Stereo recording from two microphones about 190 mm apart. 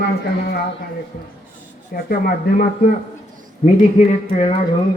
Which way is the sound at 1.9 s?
50° left (ahead or behind).